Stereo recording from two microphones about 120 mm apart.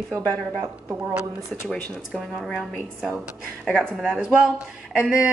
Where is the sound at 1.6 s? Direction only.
5° left (ahead or behind).